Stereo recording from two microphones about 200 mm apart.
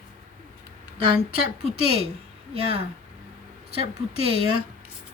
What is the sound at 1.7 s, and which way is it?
Speech, 30° right (ahead or behind).